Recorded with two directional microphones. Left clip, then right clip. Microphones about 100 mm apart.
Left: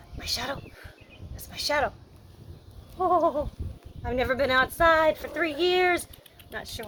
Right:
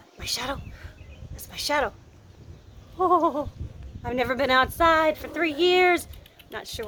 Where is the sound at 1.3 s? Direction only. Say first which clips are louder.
Right 1 dB; 55° right (ahead or behind).